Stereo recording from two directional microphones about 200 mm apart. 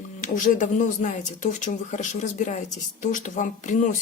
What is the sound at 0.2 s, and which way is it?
Speech, 40° left (ahead or behind).